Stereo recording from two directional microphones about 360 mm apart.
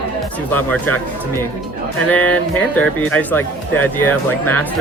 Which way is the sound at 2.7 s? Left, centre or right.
Centre.